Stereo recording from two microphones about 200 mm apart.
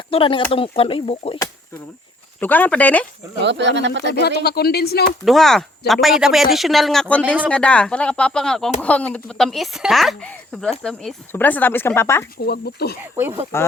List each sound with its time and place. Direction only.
0.1 s speech: 25° left (ahead or behind)
2.4 s speech: 10° left (ahead or behind)
3.4 s speech: 60° right (ahead or behind)
4.1 s speech: 55° left (ahead or behind)
5.2 s speech: centre (ahead or behind)
12.4 s speech: 50° left (ahead or behind)
13.5 s speech: 10° left (ahead or behind)